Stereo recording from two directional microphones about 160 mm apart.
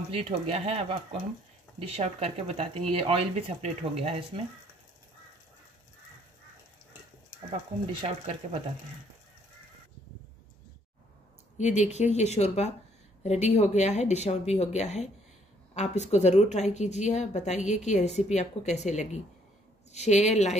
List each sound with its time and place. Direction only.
0.1 s speech: 40° right (ahead or behind)
8.0 s speech: 35° right (ahead or behind)
11.5 s a woman's voice: 45° left (ahead or behind)